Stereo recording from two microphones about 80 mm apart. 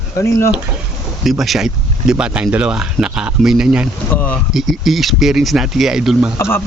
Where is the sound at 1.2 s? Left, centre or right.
Centre.